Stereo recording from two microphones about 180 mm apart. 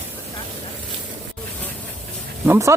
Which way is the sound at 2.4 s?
15° right (ahead or behind).